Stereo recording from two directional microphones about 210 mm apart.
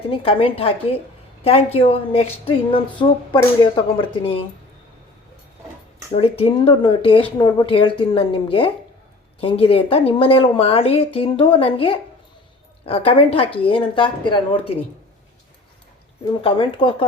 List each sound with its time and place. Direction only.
0.1 s a woman's voice: 25° left (ahead or behind)
6.1 s a woman's voice: 30° left (ahead or behind)
16.4 s a woman's voice: 25° left (ahead or behind)